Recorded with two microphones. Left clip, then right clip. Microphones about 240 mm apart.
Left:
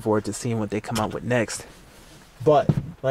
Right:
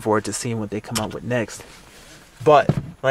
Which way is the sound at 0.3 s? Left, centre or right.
Centre.